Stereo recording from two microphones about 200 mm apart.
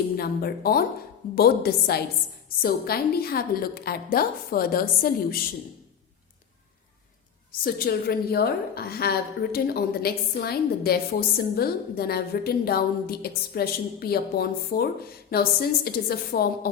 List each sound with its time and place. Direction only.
0.2 s a woman's voice: 50° left (ahead or behind)
7.6 s a woman's voice: 50° left (ahead or behind)